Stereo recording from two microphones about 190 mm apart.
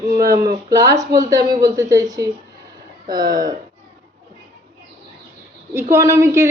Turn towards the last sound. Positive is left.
turn(degrees=-15)  # may be behind; listen again after turning